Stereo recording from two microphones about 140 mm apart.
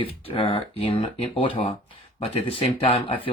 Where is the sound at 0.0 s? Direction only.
40° left (ahead or behind).